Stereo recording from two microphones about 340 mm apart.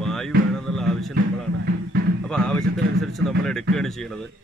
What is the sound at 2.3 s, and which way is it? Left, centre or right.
Speech, centre.